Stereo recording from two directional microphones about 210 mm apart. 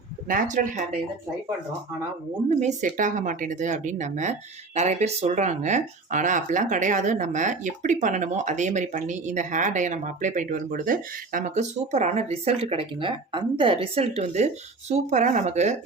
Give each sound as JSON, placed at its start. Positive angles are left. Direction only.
{"t": 0.3, "sound": "speech", "side_deg": -40}
{"t": 2.5, "sound": "speech", "side_deg": -35}